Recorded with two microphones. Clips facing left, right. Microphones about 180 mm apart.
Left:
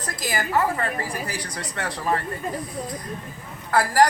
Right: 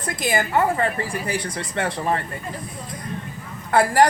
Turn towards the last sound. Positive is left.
turn(degrees=-25)  # may be behind; listen again after turning